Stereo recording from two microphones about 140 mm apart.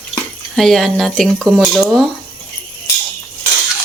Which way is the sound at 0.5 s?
Centre (ahead or behind).